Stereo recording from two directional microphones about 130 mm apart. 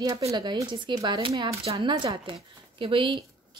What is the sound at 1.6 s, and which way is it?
Speech, 45° right (ahead or behind).